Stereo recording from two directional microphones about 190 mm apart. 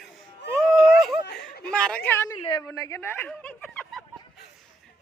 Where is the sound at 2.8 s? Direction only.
10° left (ahead or behind).